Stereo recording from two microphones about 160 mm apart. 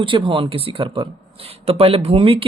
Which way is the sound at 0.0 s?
30° right (ahead or behind).